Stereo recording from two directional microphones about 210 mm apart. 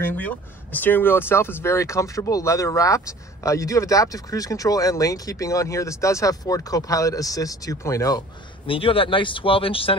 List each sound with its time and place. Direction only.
0.0 s speech: 10° left (ahead or behind)
8.6 s speech: 25° left (ahead or behind)